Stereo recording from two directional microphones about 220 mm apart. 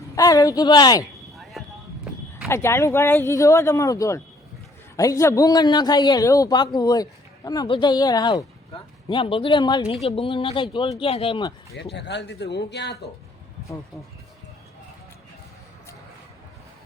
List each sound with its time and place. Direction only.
0.2 s speech: 15° left (ahead or behind)
1.3 s a sound: centre (ahead or behind)
2.5 s speech: 10° left (ahead or behind)
11.7 s speech: 50° left (ahead or behind)